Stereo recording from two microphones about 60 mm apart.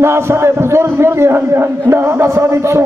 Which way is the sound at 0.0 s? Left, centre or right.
Right.